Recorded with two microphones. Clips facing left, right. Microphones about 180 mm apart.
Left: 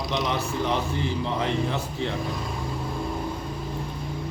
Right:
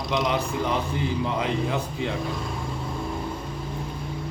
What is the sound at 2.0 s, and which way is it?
Speech, 15° right (ahead or behind).